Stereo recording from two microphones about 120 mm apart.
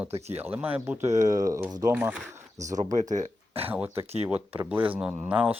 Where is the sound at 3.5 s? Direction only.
55° right (ahead or behind).